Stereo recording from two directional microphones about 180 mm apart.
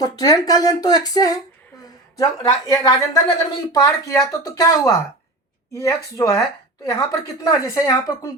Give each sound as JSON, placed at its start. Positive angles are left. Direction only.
{"t": 0.0, "sound": "a woman's voice", "side_deg": 20}